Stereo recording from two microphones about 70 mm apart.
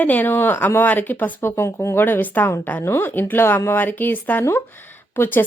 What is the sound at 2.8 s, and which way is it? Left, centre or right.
A woman's voice, left.